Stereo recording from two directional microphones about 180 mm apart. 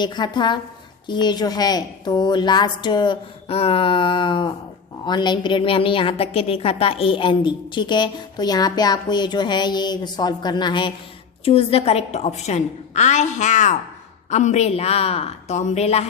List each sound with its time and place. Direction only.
0.0 s a woman's voice: 25° left (ahead or behind)